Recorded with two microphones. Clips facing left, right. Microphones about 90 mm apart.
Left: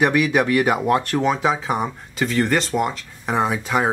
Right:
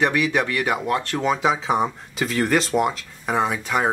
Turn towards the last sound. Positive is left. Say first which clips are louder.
# left 2 dB
turn(degrees=10)  # may be behind; listen again after turning